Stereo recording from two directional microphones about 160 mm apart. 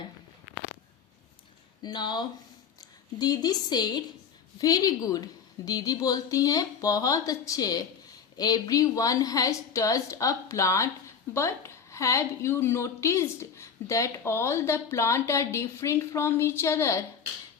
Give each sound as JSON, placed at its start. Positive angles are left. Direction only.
{"t": 1.8, "sound": "a woman's voice", "side_deg": 25}